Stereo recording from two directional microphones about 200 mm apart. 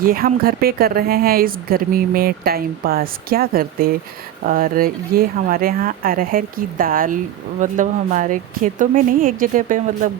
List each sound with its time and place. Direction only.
0.0 s speech: 45° right (ahead or behind)